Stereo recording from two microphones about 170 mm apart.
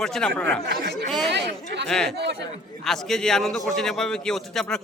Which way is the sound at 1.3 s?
85° right.